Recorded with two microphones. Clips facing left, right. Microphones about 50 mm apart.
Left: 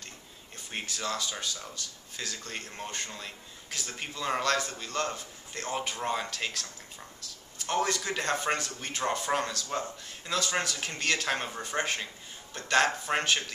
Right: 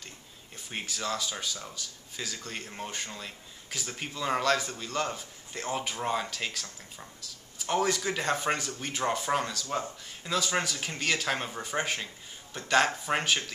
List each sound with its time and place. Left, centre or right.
0.7 s speech: centre